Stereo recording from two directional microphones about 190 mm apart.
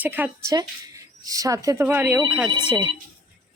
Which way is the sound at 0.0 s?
10° right (ahead or behind).